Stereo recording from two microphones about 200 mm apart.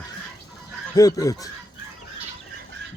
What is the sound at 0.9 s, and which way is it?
Speech, 15° left (ahead or behind).